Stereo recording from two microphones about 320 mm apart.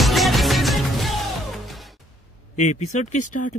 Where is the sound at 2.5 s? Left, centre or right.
Left.